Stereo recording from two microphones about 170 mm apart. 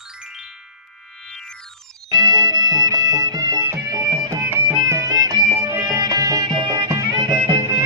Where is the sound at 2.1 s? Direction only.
25° right (ahead or behind).